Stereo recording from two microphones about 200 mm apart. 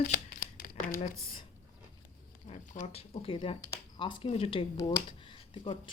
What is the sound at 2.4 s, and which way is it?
Speech, 35° left (ahead or behind).